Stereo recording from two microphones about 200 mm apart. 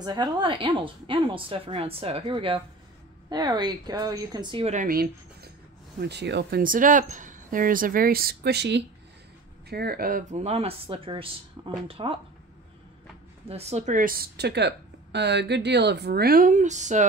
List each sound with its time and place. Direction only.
0.0 s a woman's voice: 20° right (ahead or behind)
4.7 s speech: 50° right (ahead or behind); by 12.2 s 25° right (ahead or behind)
13.5 s speech: 30° right (ahead or behind)